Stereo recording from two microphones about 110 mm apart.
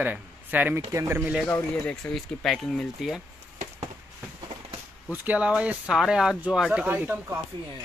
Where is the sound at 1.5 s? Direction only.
10° left (ahead or behind).